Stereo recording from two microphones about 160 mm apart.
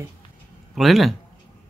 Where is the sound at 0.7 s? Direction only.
Centre (ahead or behind).